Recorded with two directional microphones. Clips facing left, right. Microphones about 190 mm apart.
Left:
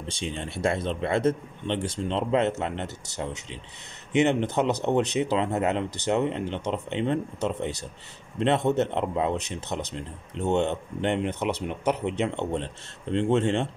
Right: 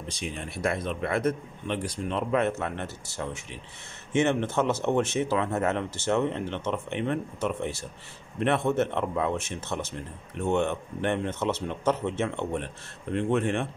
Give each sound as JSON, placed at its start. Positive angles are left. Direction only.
{"t": 0.1, "sound": "speech", "side_deg": 30}